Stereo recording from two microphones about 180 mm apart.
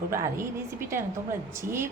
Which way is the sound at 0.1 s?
15° right (ahead or behind).